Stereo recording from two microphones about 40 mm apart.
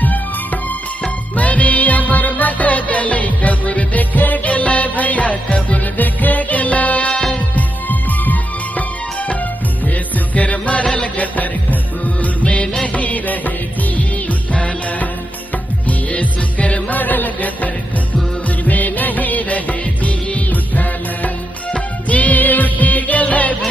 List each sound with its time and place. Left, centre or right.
1.3 s music: left
10.3 s music: left
12.8 s music of bollywood: left
14.5 s music: left
17.0 s music: left
18.7 s music: left